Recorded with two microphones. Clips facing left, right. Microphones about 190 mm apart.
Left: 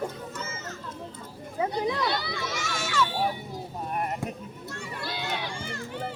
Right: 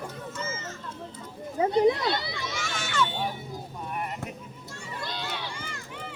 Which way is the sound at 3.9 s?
40° left (ahead or behind).